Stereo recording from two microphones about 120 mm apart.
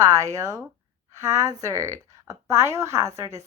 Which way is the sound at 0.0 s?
25° right (ahead or behind).